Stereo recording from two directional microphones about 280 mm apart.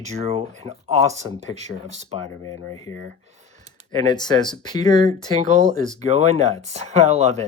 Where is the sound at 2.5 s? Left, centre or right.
Centre.